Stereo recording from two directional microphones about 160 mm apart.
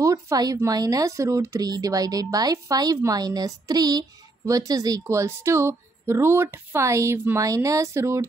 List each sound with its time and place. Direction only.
0.0 s a woman's voice: 20° right (ahead or behind)